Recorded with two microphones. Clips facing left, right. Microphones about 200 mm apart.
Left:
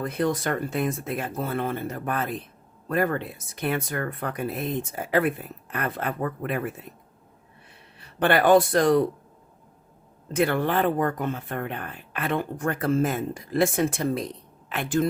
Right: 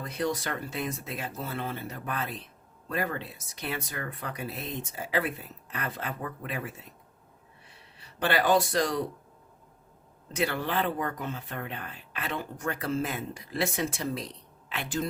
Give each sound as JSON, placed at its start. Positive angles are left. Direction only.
{"t": 0.0, "sound": "speech", "side_deg": 55}
{"t": 7.9, "sound": "speech", "side_deg": 55}
{"t": 10.3, "sound": "speech", "side_deg": 55}